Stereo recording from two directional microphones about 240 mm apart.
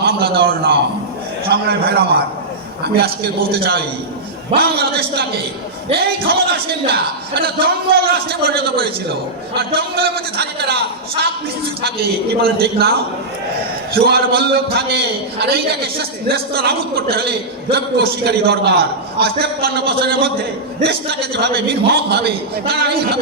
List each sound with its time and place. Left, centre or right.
0.0 s a man's voice: right
6.2 s a man's voice: right